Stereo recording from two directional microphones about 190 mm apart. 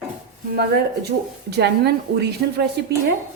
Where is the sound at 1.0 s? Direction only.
60° right (ahead or behind).